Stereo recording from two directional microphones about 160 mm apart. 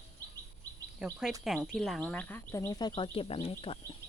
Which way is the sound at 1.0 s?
5° right (ahead or behind).